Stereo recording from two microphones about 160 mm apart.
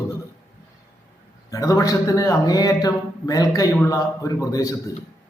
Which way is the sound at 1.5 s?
20° left (ahead or behind).